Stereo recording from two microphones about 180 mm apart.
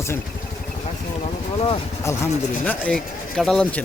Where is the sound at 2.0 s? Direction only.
15° left (ahead or behind).